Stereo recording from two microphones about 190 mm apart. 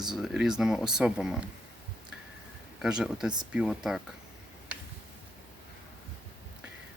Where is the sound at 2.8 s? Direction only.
5° right (ahead or behind).